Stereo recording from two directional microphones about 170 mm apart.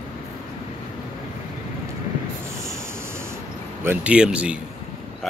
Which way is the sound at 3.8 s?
10° right (ahead or behind).